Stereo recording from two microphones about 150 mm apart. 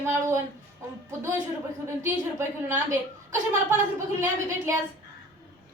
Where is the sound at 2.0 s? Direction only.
15° right (ahead or behind).